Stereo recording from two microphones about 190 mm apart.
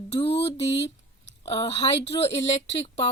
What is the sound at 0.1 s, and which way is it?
Speech, 30° left (ahead or behind).